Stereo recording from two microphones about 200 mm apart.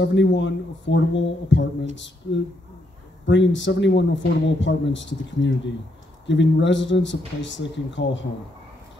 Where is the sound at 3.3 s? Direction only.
65° left (ahead or behind).